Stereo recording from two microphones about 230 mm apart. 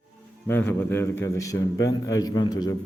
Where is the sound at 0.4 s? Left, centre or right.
Centre.